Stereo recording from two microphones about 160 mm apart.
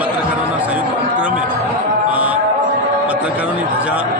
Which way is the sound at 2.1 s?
10° right (ahead or behind).